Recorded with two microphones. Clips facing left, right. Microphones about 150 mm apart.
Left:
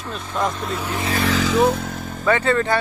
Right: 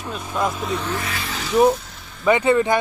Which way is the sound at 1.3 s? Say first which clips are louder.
Right 2 dB; 90° left.